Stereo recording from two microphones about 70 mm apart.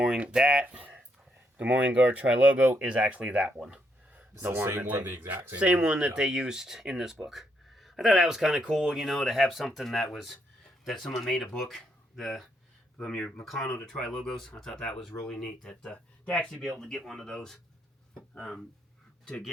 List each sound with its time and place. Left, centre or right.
0.0 s speech: centre
0.6 s a sound: right
1.5 s speech: right
4.4 s speech: right
5.5 s speech: centre
13.0 s speech: centre
13.4 s speech: centre